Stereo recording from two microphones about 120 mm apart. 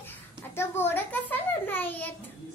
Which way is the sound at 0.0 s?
20° left (ahead or behind).